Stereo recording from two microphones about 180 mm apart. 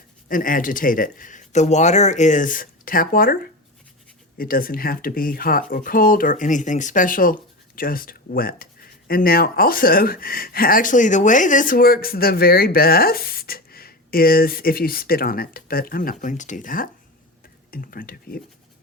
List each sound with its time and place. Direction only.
0.3 s speech: 50° left (ahead or behind)
4.4 s speech: 55° left (ahead or behind)